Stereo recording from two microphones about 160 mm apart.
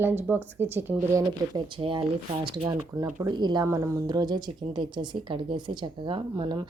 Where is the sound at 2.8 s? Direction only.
15° right (ahead or behind).